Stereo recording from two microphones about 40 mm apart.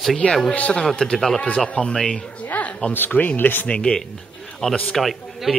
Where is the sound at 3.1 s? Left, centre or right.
Left.